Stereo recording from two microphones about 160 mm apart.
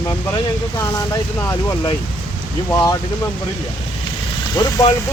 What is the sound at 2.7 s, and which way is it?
Speech, 20° left (ahead or behind).